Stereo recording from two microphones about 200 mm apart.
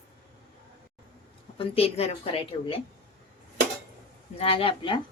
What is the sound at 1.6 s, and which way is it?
A woman's voice, 30° left (ahead or behind).